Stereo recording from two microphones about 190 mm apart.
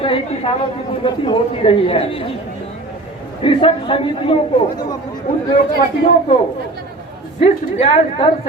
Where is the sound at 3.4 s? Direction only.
25° left (ahead or behind).